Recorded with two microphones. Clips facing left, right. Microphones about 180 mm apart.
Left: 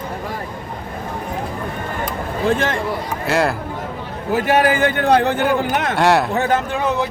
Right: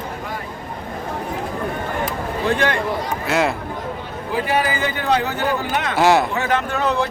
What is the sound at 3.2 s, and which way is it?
Speech, centre (ahead or behind).